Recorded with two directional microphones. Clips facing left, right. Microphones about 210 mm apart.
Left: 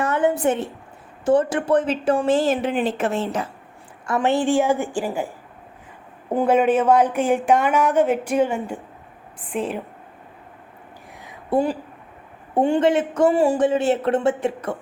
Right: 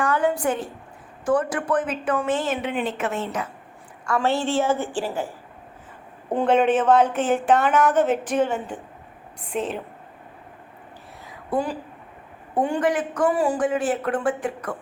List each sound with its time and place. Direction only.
0.0 s a woman's voice: 20° left (ahead or behind)
4.0 s a woman's voice: 20° left (ahead or behind)
6.3 s a woman's voice: 10° left (ahead or behind)
11.3 s a sound: 25° left (ahead or behind)
12.5 s speech: 25° left (ahead or behind)